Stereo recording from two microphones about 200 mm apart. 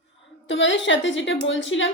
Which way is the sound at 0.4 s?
65° left (ahead or behind).